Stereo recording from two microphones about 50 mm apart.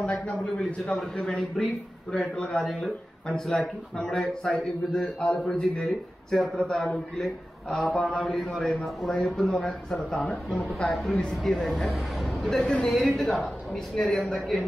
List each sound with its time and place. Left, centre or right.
0.6 s a man's voice: left
0.9 s a man's voice: centre
2.1 s a man's voice: centre
2.6 s speech: centre
3.3 s a man's voice: centre
6.3 s speech: centre
8.0 s a man's voice: centre